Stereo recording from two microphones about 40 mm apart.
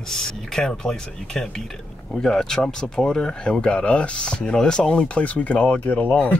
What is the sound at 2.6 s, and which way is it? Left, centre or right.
Speech, left.